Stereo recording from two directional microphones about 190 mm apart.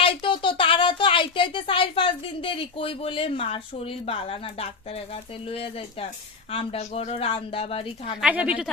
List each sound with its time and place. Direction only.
0.0 s a woman's voice: 25° left (ahead or behind)
8.2 s a woman's voice: 5° right (ahead or behind)